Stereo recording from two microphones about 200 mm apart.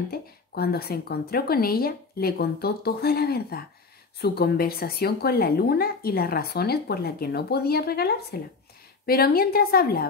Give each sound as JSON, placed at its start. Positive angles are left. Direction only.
{"t": 0.1, "sound": "speech", "side_deg": 50}